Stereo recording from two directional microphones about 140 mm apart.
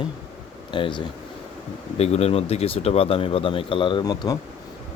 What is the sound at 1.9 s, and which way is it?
Speech, 50° left (ahead or behind).